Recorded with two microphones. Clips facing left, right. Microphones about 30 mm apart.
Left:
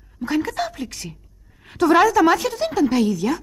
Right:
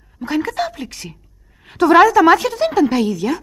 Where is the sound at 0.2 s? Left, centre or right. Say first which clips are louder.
Right 2 dB; right.